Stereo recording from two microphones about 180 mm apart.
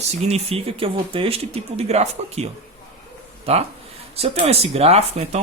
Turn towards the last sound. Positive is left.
turn(degrees=-35)  # may be behind; listen again after turning